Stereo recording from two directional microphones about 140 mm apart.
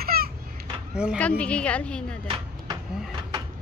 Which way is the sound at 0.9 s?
5° right (ahead or behind).